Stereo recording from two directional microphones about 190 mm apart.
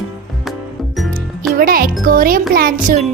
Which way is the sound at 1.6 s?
50° right (ahead or behind).